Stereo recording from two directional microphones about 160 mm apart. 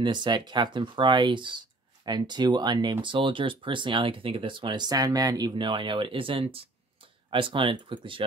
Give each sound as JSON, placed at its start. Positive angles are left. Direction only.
{"t": 0.0, "sound": "speech", "side_deg": -30}